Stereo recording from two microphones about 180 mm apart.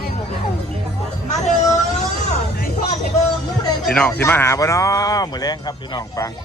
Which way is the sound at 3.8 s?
5° left (ahead or behind).